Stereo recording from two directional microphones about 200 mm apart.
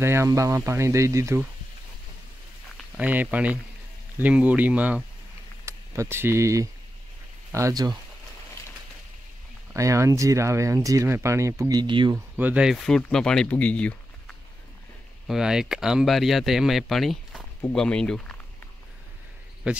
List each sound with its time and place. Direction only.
0.0 s speech: 15° right (ahead or behind)
3.0 s speech: 10° right (ahead or behind)
9.8 s speech: 15° right (ahead or behind)
12.4 s speech: 5° right (ahead or behind)
19.6 s speech: 5° right (ahead or behind)